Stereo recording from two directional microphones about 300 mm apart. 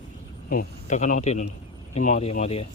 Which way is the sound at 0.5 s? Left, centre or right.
Left.